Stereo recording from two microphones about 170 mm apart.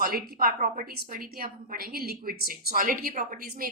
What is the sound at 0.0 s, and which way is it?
A woman's voice, 60° right (ahead or behind).